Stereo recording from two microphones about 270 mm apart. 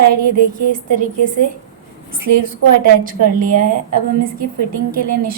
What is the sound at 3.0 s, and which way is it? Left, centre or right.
Speech, right.